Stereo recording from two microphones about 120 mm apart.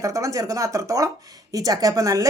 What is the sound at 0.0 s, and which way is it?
Speech, 25° right (ahead or behind).